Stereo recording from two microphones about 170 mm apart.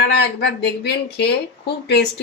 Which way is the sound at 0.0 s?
80° left.